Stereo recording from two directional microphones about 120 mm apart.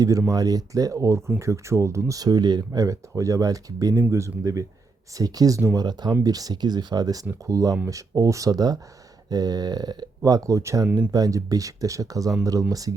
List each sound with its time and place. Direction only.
0.3 s speech: 30° right (ahead or behind)